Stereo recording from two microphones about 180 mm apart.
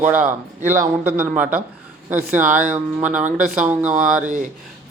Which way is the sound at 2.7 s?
10° right (ahead or behind).